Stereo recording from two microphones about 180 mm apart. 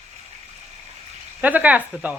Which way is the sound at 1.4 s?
10° right (ahead or behind).